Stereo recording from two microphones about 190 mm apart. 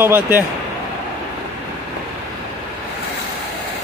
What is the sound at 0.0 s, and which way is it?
Speech, 10° right (ahead or behind).